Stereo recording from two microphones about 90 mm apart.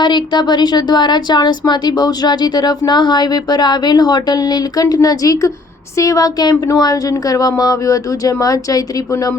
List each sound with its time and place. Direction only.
0.0 s a woman's voice: 50° left (ahead or behind)